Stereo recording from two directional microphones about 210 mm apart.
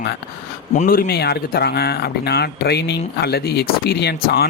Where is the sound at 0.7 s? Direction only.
40° left (ahead or behind).